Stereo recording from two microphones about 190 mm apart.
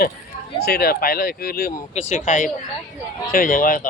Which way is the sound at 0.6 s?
55° left (ahead or behind).